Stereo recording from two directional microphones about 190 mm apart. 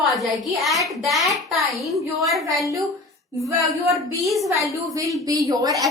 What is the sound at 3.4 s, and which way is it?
Speech, 15° right (ahead or behind).